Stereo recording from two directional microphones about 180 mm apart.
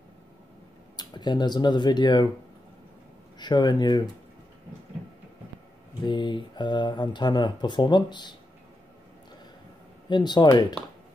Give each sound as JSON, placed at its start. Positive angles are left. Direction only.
{"t": 0.9, "sound": "speech", "side_deg": 25}
{"t": 3.3, "sound": "speech", "side_deg": 25}
{"t": 6.0, "sound": "speech", "side_deg": 25}
{"t": 10.0, "sound": "speech", "side_deg": 25}